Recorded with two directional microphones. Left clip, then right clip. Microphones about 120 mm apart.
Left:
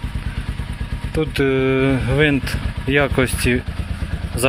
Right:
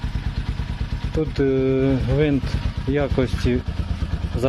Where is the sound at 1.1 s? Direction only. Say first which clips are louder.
Left 3 dB; 15° right (ahead or behind).